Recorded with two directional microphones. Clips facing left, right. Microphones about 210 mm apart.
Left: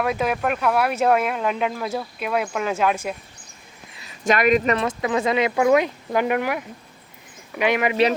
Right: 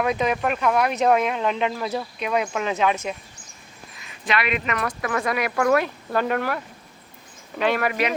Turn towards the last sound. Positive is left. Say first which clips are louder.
# left 2 dB
turn(degrees=15)  # may be behind; listen again after turning